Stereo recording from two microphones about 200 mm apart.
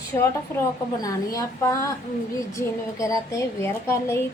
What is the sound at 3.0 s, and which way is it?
A woman's voice, 15° left (ahead or behind).